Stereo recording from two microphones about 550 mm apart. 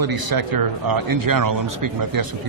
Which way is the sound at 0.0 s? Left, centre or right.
Right.